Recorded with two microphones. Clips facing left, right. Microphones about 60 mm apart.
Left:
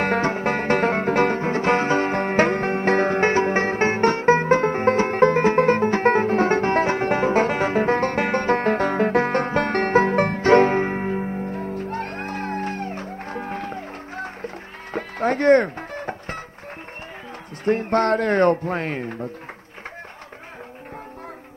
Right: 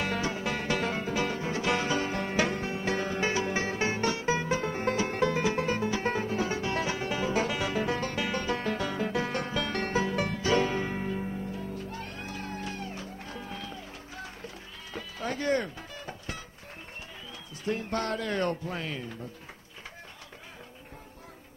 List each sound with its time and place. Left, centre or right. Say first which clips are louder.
0.0 s music: left 10 dB; left
17.6 s speech: left 12 dB; left